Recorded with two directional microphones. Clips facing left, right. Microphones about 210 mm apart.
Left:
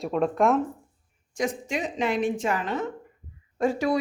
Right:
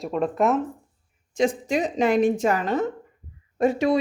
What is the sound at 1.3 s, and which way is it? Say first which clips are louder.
A woman's voice: right 6 dB; 30° right (ahead or behind).